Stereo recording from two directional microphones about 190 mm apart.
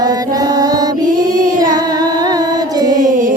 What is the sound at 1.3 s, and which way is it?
Child singing, 45° right (ahead or behind).